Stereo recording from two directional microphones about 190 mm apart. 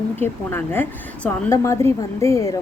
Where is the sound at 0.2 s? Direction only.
10° left (ahead or behind).